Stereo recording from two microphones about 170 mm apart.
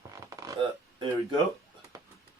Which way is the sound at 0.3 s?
20° right (ahead or behind).